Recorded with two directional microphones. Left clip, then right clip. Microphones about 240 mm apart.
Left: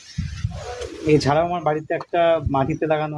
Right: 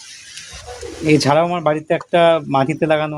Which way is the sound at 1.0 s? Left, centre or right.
Right.